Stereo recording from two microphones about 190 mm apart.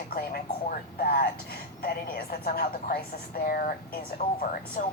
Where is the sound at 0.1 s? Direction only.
50° left (ahead or behind).